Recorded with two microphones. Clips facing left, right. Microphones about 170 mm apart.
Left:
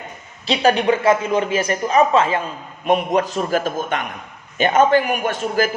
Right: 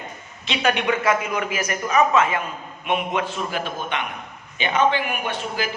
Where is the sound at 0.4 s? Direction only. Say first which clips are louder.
Left 6 dB; 35° left (ahead or behind).